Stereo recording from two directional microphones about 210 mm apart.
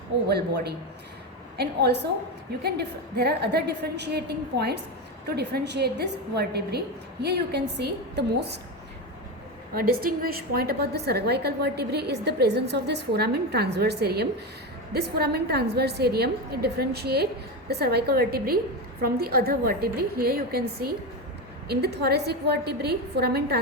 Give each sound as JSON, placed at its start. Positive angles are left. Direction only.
{"t": 0.3, "sound": "a woman's voice", "side_deg": -50}
{"t": 10.2, "sound": "a woman's voice", "side_deg": -45}